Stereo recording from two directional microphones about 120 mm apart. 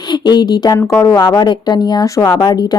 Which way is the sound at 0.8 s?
20° left (ahead or behind).